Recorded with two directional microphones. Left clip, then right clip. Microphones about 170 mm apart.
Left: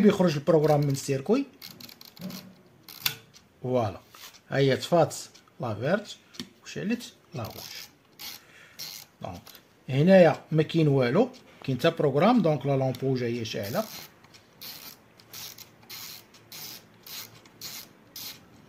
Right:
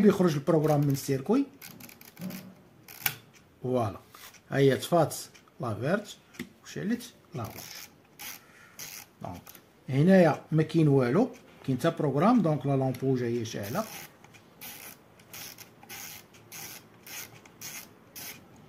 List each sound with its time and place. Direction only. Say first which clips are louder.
0.0 s speech: left 2 dB; 50° left (ahead or behind)
3.6 s speech: left 2 dB; 50° left (ahead or behind)
9.8 s speech: left 4 dB; 50° left (ahead or behind)